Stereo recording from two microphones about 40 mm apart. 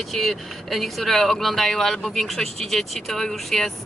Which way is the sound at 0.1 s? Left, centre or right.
Centre.